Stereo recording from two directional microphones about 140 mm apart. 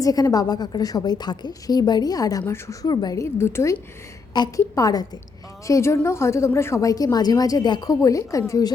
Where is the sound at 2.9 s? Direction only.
30° left (ahead or behind).